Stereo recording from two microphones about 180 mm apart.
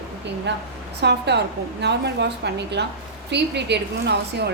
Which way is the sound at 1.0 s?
70° right (ahead or behind).